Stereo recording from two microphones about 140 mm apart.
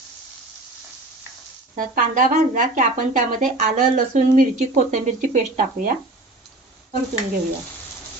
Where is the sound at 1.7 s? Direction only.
65° right (ahead or behind).